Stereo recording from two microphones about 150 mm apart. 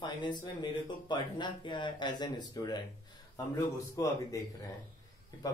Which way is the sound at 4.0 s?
25° left (ahead or behind).